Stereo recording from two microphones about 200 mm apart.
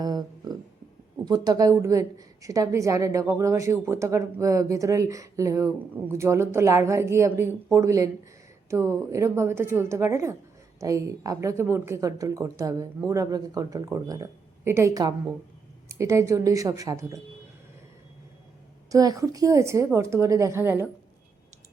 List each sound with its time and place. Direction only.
0.0 s a sound: 20° right (ahead or behind)
1.2 s a woman's voice: 20° right (ahead or behind)
18.9 s a woman's voice: 15° right (ahead or behind)